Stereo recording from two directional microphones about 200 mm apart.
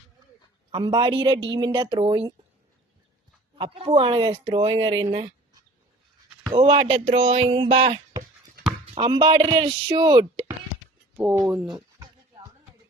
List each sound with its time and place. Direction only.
0.7 s speech: 20° right (ahead or behind)
3.5 s speech: 30° right (ahead or behind)
6.6 s speech: 25° right (ahead or behind)
9.0 s speech: 25° right (ahead or behind)
11.2 s speech: 5° right (ahead or behind)
11.7 s a sound: 20° right (ahead or behind)